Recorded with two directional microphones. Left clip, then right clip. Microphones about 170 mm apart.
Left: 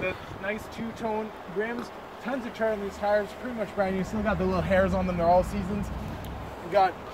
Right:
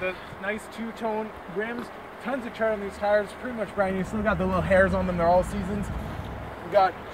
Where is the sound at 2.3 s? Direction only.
5° left (ahead or behind).